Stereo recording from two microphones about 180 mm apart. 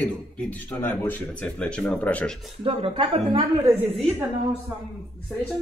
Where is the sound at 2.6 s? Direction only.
30° right (ahead or behind).